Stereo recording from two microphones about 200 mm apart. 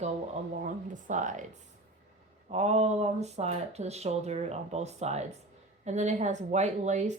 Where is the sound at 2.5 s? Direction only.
35° right (ahead or behind).